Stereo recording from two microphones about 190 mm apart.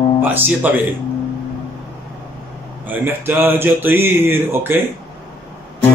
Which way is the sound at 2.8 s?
10° right (ahead or behind).